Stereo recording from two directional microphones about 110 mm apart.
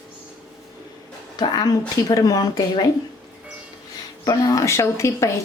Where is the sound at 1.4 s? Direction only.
40° left (ahead or behind).